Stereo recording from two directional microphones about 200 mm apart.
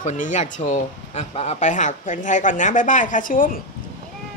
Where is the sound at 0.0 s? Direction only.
40° left (ahead or behind).